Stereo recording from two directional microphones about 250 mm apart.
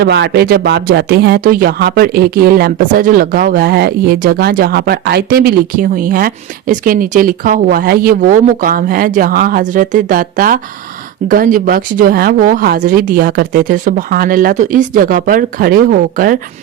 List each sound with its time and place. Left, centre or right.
0.0 s speech: right